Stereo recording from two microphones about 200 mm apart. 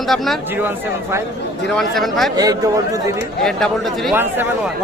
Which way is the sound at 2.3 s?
20° right (ahead or behind).